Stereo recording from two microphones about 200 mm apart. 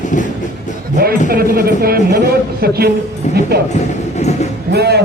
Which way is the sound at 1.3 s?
50° right (ahead or behind).